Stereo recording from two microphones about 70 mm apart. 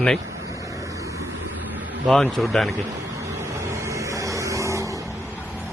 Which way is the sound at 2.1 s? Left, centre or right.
Centre.